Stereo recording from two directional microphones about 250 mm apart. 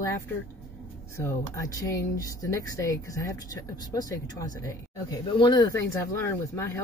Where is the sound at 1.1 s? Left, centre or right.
Centre.